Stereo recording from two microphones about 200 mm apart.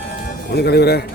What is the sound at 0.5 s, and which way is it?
Speech, 55° left (ahead or behind).